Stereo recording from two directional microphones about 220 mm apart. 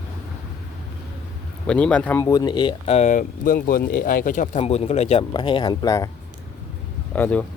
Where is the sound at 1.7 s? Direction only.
5° left (ahead or behind).